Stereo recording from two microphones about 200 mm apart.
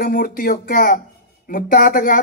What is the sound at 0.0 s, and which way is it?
Speech, 45° left (ahead or behind).